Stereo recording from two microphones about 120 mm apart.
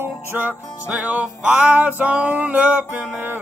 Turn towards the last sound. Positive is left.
turn(degrees=-15)  # may be behind; listen again after turning